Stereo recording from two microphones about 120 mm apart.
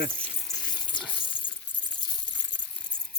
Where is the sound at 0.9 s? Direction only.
40° left (ahead or behind).